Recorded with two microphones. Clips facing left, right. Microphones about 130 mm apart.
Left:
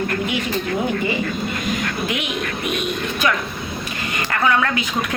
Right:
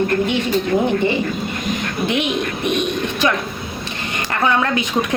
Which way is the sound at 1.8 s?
25° right (ahead or behind).